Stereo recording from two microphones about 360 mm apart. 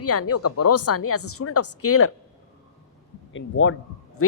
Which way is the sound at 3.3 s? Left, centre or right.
Left.